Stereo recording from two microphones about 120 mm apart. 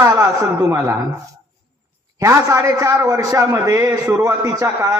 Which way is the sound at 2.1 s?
25° right (ahead or behind).